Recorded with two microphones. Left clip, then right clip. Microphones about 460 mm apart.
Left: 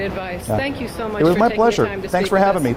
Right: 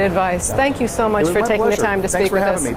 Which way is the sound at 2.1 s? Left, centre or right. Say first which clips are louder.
Left 1 dB; left.